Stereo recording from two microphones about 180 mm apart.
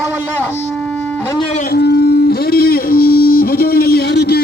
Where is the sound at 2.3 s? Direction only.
55° left (ahead or behind).